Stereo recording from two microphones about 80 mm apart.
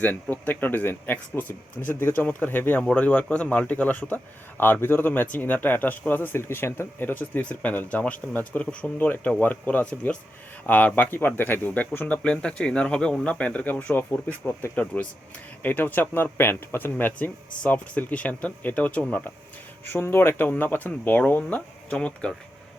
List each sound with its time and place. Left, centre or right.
0.0 s a man's voice: left